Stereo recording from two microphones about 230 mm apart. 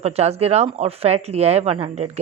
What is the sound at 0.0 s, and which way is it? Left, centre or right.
Speech, right.